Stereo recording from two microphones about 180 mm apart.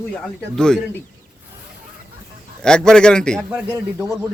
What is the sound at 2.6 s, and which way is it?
Speech, 5° left (ahead or behind).